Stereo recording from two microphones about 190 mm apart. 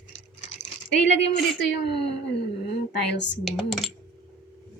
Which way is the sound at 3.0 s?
70° left (ahead or behind).